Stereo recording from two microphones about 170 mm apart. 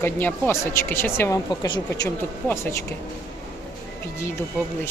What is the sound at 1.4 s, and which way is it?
Speech, 25° left (ahead or behind).